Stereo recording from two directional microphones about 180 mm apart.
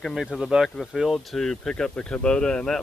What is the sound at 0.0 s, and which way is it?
Speech, centre (ahead or behind).